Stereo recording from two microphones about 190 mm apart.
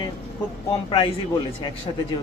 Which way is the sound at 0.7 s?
25° left (ahead or behind).